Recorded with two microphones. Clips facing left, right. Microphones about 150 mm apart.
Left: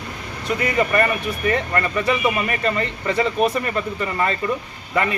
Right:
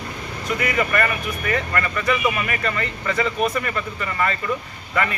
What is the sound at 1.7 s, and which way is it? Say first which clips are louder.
A man's voice: left 2 dB; 25° left (ahead or behind).